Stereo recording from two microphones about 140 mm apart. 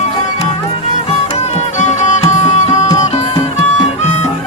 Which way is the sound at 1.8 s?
60° left (ahead or behind).